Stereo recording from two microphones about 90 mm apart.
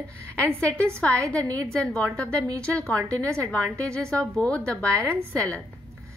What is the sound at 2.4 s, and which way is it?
Speech, 40° right (ahead or behind).